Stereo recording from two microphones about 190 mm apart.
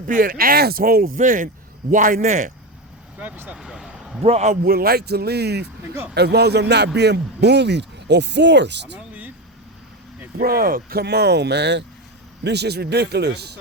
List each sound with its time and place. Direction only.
0.1 s speech: 50° right (ahead or behind)
3.2 s vehicle: 10° right (ahead or behind)
4.2 s a man's voice: 35° right (ahead or behind)
4.6 s a man's voice: 50° right (ahead or behind)
9.0 s vehicle: 10° right (ahead or behind)
10.3 s a man's voice: 50° right (ahead or behind)